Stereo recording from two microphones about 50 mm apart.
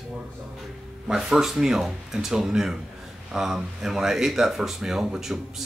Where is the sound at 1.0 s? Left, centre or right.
Centre.